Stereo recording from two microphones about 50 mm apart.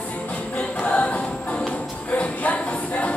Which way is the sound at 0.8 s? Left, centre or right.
Left.